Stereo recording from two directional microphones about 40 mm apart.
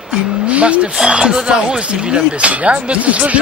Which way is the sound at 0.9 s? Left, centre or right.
Centre.